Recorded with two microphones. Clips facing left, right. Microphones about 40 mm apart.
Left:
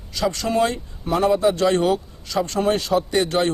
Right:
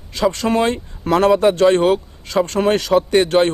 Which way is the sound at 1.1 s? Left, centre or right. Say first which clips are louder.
Right 5 dB; right.